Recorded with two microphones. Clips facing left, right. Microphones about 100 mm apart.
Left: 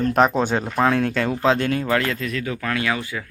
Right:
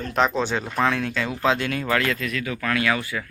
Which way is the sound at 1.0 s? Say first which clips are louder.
Left 5 dB; 50° left (ahead or behind).